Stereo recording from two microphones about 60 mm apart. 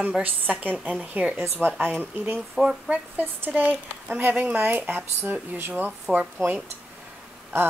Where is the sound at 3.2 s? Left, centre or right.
Right.